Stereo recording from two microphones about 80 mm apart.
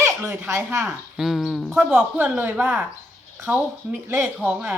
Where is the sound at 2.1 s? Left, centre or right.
Centre.